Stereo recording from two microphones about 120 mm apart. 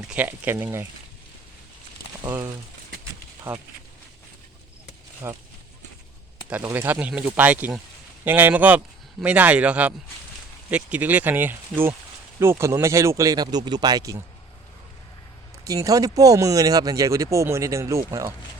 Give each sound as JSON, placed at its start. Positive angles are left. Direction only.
{"t": 0.0, "sound": "speech", "side_deg": -10}
{"t": 2.2, "sound": "speech", "side_deg": -30}
{"t": 3.5, "sound": "speech", "side_deg": -15}
{"t": 5.2, "sound": "speech", "side_deg": -20}
{"t": 6.5, "sound": "speech", "side_deg": -20}
{"t": 15.6, "sound": "speech", "side_deg": -30}